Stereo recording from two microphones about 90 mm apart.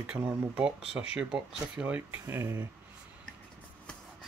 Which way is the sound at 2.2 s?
30° right (ahead or behind).